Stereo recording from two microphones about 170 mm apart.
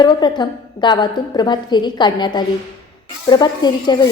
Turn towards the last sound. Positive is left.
turn(degrees=25)  # may be behind; listen again after turning